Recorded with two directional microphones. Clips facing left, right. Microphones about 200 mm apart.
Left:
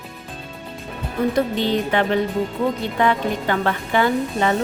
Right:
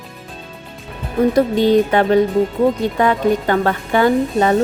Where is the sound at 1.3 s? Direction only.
45° right (ahead or behind).